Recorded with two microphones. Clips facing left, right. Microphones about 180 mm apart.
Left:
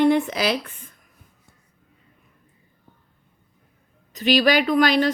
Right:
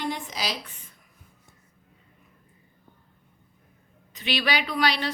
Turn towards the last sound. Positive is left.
turn(degrees=45)  # may be behind; listen again after turning